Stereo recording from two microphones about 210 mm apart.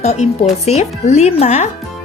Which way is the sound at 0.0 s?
30° left (ahead or behind).